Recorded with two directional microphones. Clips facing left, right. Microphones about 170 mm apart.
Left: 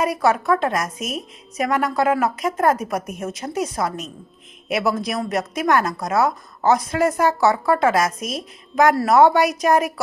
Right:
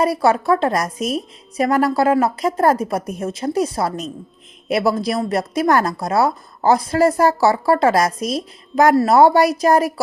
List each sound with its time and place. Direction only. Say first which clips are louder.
0.0 s speech: right 3 dB; 30° right (ahead or behind)